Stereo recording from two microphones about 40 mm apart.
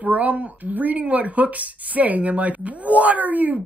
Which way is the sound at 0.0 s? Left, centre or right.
Right.